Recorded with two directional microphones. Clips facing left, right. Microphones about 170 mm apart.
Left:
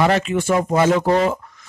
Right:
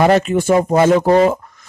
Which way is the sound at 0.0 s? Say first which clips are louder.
Right 5 dB; 45° right (ahead or behind).